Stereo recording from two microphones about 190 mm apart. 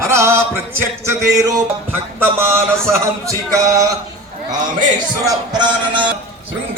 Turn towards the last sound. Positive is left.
turn(degrees=-25)  # may be behind; listen again after turning